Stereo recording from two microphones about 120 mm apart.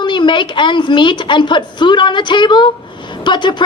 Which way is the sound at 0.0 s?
40° left (ahead or behind).